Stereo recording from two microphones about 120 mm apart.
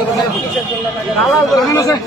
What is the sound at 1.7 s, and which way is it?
Speech, 25° left (ahead or behind).